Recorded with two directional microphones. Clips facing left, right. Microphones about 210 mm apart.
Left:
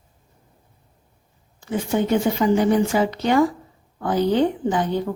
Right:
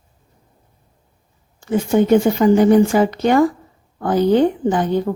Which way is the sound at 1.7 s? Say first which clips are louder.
Right 7 dB; 45° right (ahead or behind).